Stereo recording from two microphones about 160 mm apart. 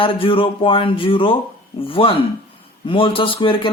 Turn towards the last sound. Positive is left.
turn(degrees=30)  # may be behind; listen again after turning